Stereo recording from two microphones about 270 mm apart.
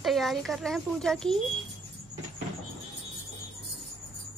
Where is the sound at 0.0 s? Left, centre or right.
Centre.